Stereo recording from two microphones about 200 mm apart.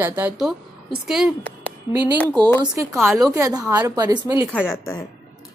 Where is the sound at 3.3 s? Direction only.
15° right (ahead or behind).